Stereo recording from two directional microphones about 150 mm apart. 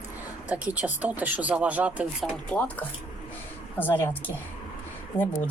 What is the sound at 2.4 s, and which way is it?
Speech, 10° left (ahead or behind).